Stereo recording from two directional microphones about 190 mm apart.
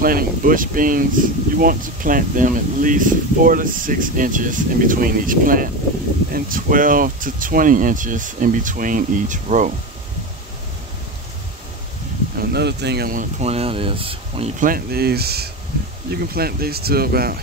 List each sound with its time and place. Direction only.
0.0 s speech: 50° right (ahead or behind)
12.4 s speech: 60° right (ahead or behind); by 14.5 s 30° right (ahead or behind)
14.6 s speech: 50° right (ahead or behind)